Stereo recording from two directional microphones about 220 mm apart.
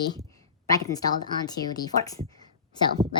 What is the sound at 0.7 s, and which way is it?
Speech, 15° left (ahead or behind).